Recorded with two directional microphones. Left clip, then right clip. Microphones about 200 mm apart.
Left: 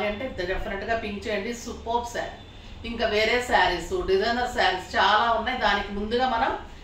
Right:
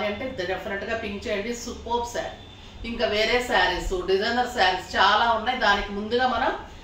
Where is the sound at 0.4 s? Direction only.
Centre (ahead or behind).